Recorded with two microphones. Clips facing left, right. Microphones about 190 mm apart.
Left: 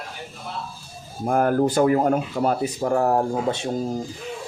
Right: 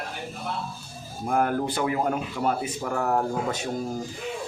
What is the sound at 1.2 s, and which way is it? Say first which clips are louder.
Speech: left 5 dB; 45° left (ahead or behind).